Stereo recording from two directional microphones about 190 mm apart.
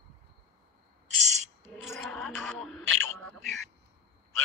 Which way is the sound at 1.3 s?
35° right (ahead or behind).